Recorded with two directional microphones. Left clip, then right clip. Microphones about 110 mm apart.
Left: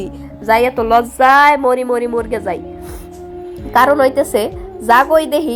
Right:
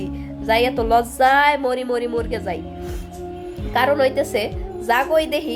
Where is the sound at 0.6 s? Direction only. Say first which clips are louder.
Left 5 dB; 15° left (ahead or behind); by 2.6 s 30° left (ahead or behind).